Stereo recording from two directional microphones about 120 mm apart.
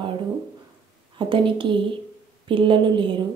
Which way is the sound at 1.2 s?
45° right (ahead or behind).